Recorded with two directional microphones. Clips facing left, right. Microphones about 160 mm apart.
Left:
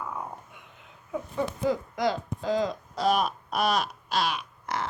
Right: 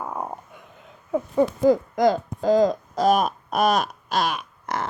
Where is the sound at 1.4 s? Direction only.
45° right (ahead or behind).